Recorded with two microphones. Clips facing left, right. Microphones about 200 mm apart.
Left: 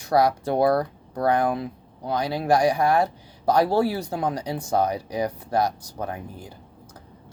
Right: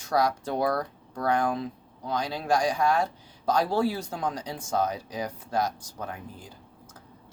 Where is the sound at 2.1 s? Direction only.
65° left (ahead or behind).